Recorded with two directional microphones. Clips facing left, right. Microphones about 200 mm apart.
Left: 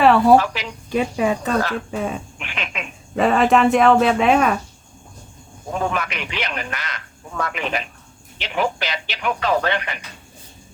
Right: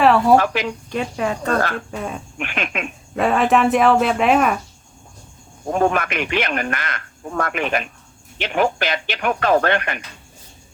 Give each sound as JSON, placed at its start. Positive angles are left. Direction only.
{"t": 0.0, "sound": "a sound", "side_deg": 0}
{"t": 0.3, "sound": "speech", "side_deg": -55}
{"t": 0.9, "sound": "speech", "side_deg": 5}
{"t": 2.4, "sound": "speech", "side_deg": -55}
{"t": 3.2, "sound": "speech", "side_deg": 0}
{"t": 5.8, "sound": "speech", "side_deg": -55}